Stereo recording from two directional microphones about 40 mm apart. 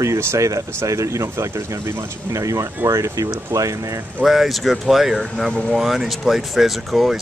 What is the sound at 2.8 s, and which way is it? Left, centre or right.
Speech, right.